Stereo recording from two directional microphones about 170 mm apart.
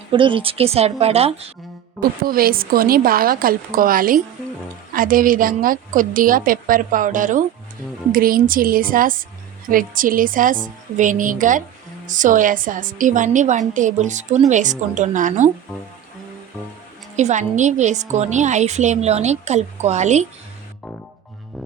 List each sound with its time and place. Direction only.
0.1 s a woman's voice: 30° right (ahead or behind)
2.0 s a woman's voice: 60° right (ahead or behind)
17.2 s a woman's voice: 45° right (ahead or behind)